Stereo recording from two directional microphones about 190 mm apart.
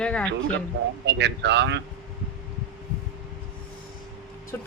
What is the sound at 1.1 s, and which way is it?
Speech, 65° right (ahead or behind).